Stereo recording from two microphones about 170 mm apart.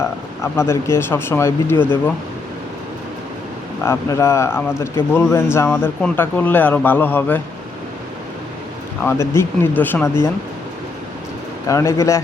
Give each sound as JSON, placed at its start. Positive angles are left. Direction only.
{"t": 0.4, "sound": "speech", "side_deg": 15}
{"t": 3.8, "sound": "speech", "side_deg": 15}
{"t": 9.0, "sound": "speech", "side_deg": 15}
{"t": 11.7, "sound": "speech", "side_deg": 15}